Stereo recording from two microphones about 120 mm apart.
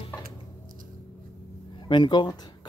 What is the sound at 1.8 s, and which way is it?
Speech, 40° left (ahead or behind).